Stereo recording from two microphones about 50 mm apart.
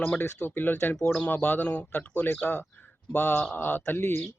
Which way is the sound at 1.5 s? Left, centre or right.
Left.